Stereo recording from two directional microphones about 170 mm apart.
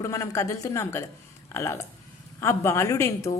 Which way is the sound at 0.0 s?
20° left (ahead or behind).